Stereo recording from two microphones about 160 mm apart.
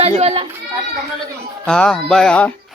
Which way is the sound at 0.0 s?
40° right (ahead or behind).